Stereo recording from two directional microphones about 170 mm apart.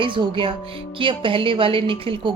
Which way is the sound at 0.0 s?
30° right (ahead or behind).